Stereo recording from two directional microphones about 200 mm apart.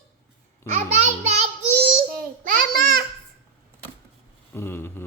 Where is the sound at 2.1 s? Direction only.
45° right (ahead or behind).